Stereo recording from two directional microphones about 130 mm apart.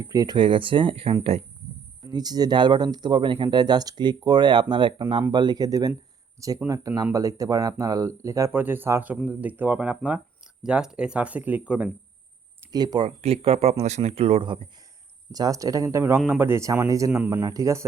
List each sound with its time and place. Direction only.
0.0 s speech: 25° right (ahead or behind)
0.3 s speech: 40° right (ahead or behind)
2.0 s speech: 30° right (ahead or behind); by 11.9 s 10° right (ahead or behind)
12.7 s speech: 30° right (ahead or behind)
13.1 s speech: 50° right (ahead or behind)
15.3 s speech: 30° right (ahead or behind)